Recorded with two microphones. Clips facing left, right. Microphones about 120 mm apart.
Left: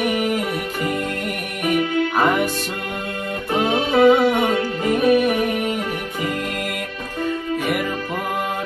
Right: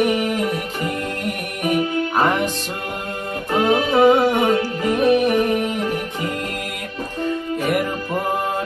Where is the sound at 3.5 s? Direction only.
45° right (ahead or behind).